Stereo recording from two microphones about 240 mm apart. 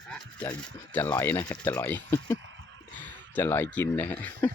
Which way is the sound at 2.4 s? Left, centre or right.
Right.